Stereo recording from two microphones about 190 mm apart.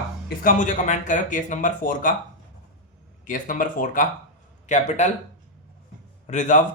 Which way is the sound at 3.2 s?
45° left (ahead or behind).